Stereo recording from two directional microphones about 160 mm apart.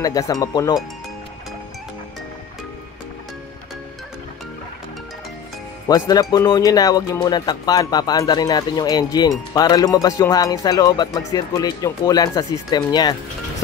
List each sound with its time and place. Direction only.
0.0 s speech: 20° left (ahead or behind)
5.9 s speech: 25° left (ahead or behind)